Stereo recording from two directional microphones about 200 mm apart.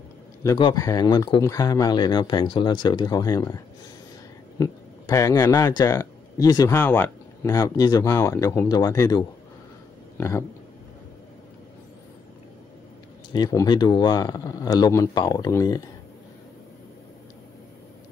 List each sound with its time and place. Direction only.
0.4 s speech: 20° left (ahead or behind)
13.3 s speech: 20° left (ahead or behind)